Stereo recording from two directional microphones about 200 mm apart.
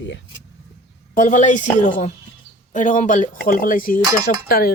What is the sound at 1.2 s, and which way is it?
Speech, 40° left (ahead or behind).